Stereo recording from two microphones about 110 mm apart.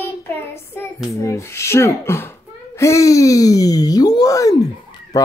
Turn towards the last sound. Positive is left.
turn(degrees=35)  # may be behind; listen again after turning